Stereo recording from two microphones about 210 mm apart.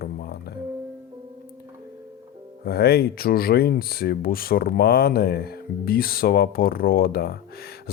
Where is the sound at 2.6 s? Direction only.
50° left (ahead or behind).